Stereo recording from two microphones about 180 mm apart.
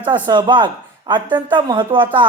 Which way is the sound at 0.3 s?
25° right (ahead or behind).